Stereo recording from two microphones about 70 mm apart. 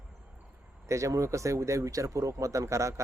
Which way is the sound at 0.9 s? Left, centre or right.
Right.